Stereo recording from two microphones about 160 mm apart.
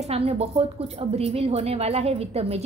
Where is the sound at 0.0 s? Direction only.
40° right (ahead or behind).